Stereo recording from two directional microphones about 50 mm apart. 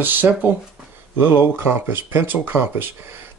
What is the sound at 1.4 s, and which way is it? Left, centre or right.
Speech, right.